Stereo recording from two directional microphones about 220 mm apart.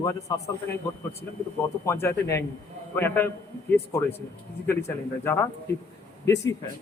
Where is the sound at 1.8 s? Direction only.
10° left (ahead or behind).